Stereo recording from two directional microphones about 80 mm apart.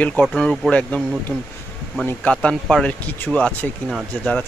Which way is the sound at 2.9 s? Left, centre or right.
Centre.